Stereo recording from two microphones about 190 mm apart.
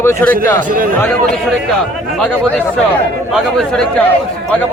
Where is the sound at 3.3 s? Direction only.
Centre (ahead or behind).